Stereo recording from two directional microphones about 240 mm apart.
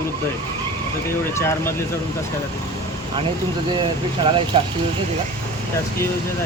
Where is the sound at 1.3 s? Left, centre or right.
Centre.